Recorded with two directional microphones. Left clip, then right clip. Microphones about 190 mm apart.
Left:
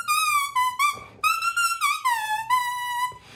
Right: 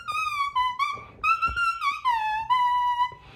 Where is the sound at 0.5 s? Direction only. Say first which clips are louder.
Left 3 dB; 10° left (ahead or behind).